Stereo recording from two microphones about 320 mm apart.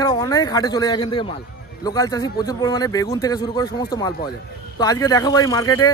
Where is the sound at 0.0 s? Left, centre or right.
Centre.